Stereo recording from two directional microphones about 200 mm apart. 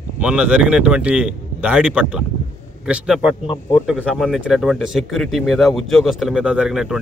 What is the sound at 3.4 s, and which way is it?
Speech, 20° left (ahead or behind).